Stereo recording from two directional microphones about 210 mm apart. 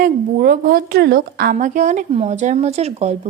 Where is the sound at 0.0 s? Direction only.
40° right (ahead or behind).